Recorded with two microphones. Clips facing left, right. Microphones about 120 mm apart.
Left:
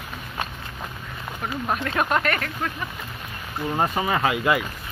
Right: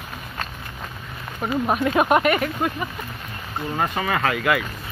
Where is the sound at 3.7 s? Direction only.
15° left (ahead or behind).